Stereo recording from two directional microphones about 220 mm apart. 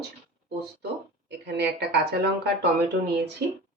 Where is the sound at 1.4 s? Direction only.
50° right (ahead or behind).